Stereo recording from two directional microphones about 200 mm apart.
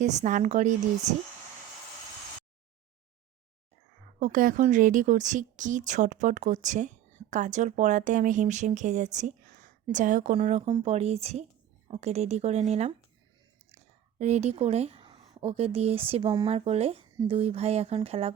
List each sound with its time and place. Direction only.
0.0 s speech: 35° right (ahead or behind)
4.2 s speech: 40° right (ahead or behind)
10.7 s speech: 20° right (ahead or behind)
10.9 s speech: 30° right (ahead or behind)